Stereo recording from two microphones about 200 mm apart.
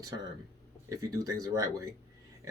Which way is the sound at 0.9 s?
15° right (ahead or behind).